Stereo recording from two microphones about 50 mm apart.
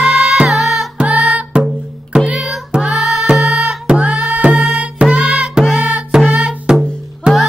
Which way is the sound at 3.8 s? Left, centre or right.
Right.